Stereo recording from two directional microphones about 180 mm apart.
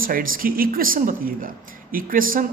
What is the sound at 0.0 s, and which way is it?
Speech, 50° right (ahead or behind).